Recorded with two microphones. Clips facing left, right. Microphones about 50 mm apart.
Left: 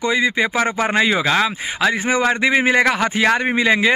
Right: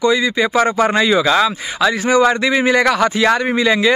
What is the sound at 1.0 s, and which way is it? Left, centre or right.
Speech, left.